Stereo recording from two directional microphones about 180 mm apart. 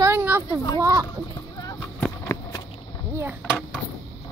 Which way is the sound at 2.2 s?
20° left (ahead or behind).